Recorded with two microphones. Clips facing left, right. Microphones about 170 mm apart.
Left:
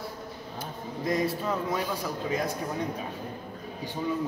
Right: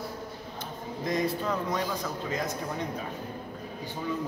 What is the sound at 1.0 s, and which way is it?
Speech, 5° left (ahead or behind).